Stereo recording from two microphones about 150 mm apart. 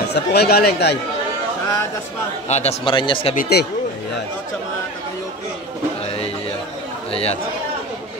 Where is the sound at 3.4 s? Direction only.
90° left.